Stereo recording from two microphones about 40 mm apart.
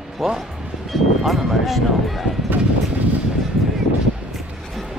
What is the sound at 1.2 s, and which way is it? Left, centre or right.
Speech, centre.